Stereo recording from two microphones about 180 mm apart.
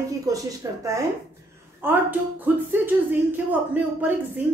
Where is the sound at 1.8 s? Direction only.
10° right (ahead or behind).